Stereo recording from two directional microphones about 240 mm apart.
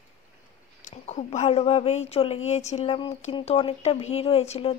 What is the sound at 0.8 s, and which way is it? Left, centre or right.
Speech, left.